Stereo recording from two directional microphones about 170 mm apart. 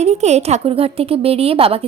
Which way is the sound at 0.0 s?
40° right (ahead or behind).